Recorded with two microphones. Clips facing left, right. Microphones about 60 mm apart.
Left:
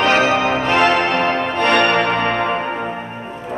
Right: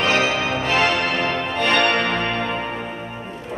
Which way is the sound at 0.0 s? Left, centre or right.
Left.